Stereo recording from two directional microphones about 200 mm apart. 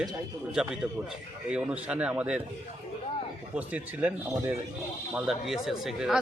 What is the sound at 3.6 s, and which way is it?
Speech, 5° right (ahead or behind).